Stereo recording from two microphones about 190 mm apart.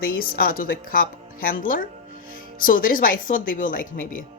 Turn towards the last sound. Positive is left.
turn(degrees=45)  # may be behind; listen again after turning